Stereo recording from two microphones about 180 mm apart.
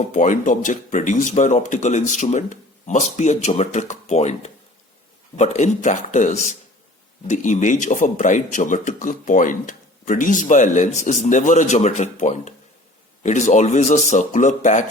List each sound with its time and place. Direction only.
0.1 s speech: 45° left (ahead or behind)